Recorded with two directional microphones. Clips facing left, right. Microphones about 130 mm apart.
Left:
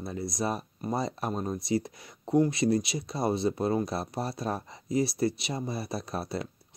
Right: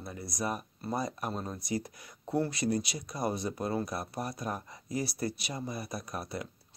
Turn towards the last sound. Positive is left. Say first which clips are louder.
# left 5 dB
turn(degrees=30)  # may be behind; listen again after turning